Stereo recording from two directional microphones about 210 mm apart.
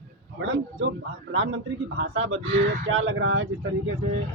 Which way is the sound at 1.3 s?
65° right (ahead or behind).